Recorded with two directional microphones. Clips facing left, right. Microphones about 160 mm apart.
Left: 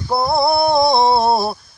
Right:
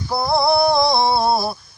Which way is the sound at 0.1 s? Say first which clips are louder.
Left 1 dB; 30° left (ahead or behind).